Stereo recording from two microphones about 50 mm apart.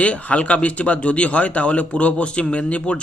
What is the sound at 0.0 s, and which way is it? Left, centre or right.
Speech, left.